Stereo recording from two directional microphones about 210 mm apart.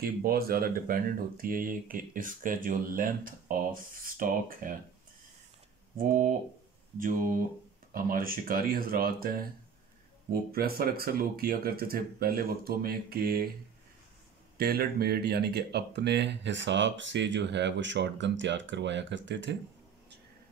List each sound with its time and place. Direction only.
0.0 s speech: 45° right (ahead or behind)
5.9 s speech: 40° right (ahead or behind)
10.5 s speech: 45° right (ahead or behind)
14.6 s speech: 45° right (ahead or behind)